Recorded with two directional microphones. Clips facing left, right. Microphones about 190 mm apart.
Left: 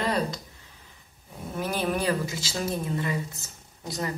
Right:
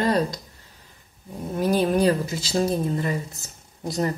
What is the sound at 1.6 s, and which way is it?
Speech, 40° right (ahead or behind).